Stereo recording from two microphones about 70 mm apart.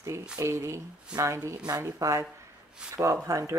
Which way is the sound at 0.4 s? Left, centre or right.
Right.